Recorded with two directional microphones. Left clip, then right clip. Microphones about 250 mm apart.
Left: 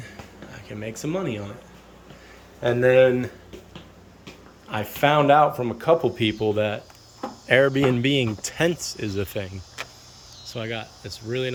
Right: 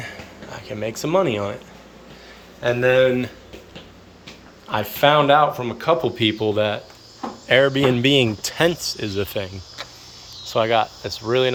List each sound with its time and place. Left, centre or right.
0.0 s a sound: centre
2.6 s speech: left
4.7 s speech: centre